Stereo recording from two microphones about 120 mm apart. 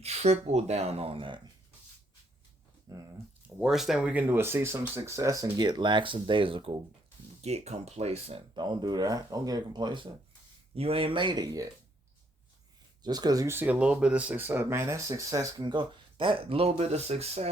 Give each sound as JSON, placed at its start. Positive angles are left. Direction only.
{"t": 0.0, "sound": "speech", "side_deg": -65}
{"t": 2.9, "sound": "speech", "side_deg": -30}
{"t": 3.4, "sound": "speech", "side_deg": -5}
{"t": 7.4, "sound": "speech", "side_deg": -65}
{"t": 8.5, "sound": "speech", "side_deg": -40}
{"t": 10.8, "sound": "speech", "side_deg": -50}
{"t": 13.0, "sound": "speech", "side_deg": -35}
{"t": 15.6, "sound": "speech", "side_deg": -40}